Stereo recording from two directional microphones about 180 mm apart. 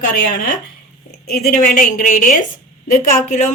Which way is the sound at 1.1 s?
55° left (ahead or behind).